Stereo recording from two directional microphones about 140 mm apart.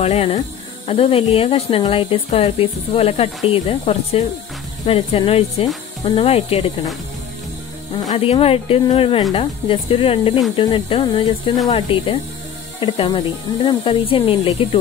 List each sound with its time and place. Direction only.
0.0 s speech: 50° left (ahead or behind)
8.2 s speech: 45° left (ahead or behind)